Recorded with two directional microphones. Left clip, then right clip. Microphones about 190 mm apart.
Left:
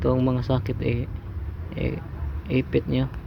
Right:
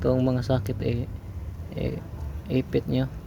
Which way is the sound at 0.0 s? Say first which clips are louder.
Left 1 dB; 10° right (ahead or behind).